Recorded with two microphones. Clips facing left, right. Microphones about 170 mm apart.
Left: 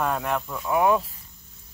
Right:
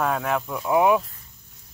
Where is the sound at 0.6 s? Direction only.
15° right (ahead or behind).